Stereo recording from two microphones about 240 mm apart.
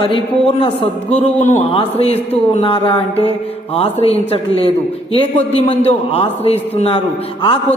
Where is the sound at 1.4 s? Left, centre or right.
Left.